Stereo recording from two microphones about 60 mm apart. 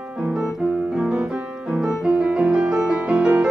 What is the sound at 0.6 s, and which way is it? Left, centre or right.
Piano, centre.